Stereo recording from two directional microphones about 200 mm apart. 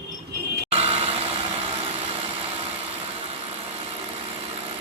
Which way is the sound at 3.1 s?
30° right (ahead or behind).